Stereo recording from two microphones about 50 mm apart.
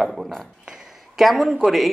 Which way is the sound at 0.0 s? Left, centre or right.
Centre.